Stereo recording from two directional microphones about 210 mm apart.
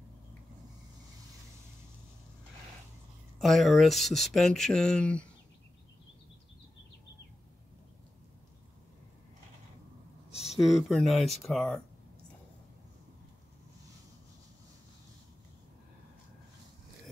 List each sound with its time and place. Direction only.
3.3 s speech: centre (ahead or behind)
10.3 s a sound: 30° left (ahead or behind)
10.6 s speech: centre (ahead or behind)